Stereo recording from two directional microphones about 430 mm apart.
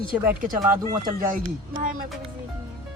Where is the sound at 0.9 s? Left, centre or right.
Centre.